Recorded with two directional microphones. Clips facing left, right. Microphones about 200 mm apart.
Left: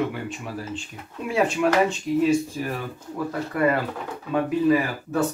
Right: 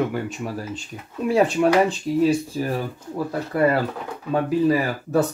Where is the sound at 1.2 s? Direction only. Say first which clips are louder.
Right 4 dB; 35° right (ahead or behind).